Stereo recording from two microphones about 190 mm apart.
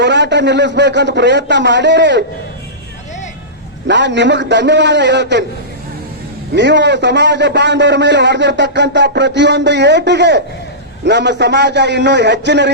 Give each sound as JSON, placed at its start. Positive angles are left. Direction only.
{"t": 0.0, "sound": "a man's voice", "side_deg": -65}
{"t": 3.8, "sound": "a man's voice", "side_deg": -70}
{"t": 6.5, "sound": "a man's voice", "side_deg": -65}